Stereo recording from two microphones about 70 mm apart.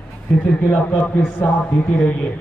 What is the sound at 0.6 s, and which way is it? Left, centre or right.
Speech, left.